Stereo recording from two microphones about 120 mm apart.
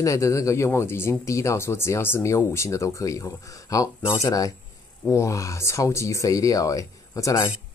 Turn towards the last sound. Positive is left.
turn(degrees=30)  # may be behind; listen again after turning